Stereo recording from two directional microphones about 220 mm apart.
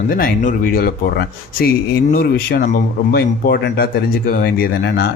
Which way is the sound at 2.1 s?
45° left (ahead or behind).